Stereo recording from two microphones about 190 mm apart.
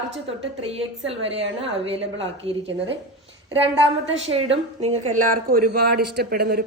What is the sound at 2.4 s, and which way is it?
Speech, 30° right (ahead or behind).